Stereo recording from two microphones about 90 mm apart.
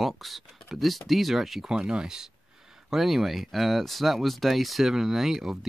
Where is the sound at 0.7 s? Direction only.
Centre (ahead or behind).